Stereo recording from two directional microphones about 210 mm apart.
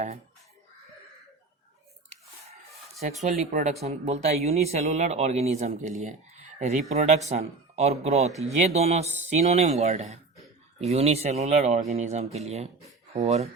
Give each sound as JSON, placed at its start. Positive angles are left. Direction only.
{"t": 3.2, "sound": "speech", "side_deg": -35}